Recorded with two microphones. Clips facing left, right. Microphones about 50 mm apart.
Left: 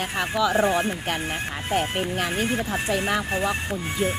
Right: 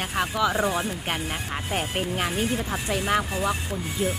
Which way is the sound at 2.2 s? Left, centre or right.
Left.